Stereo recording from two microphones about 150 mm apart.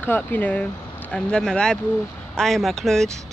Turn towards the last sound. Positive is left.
turn(degrees=5)  # may be behind; listen again after turning